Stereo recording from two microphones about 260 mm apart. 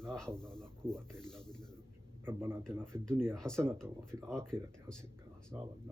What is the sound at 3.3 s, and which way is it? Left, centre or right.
Speech, centre.